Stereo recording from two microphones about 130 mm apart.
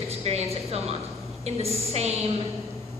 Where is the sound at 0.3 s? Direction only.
55° right (ahead or behind).